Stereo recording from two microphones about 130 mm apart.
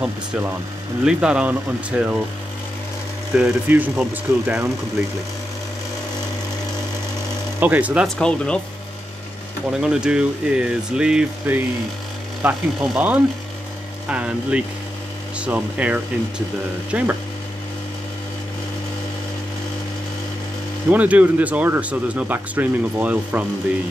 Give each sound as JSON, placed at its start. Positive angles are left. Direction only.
{"t": 0.0, "sound": "speech", "side_deg": -15}
{"t": 3.3, "sound": "speech", "side_deg": -10}
{"t": 7.6, "sound": "speech", "side_deg": -10}
{"t": 8.2, "sound": "speech", "side_deg": 5}
{"t": 9.7, "sound": "speech", "side_deg": -5}
{"t": 20.9, "sound": "speech", "side_deg": -10}